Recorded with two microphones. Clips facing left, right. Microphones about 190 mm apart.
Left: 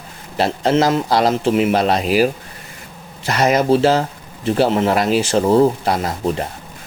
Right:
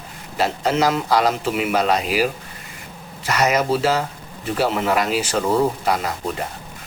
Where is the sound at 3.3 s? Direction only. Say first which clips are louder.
Left 4 dB; 30° left (ahead or behind).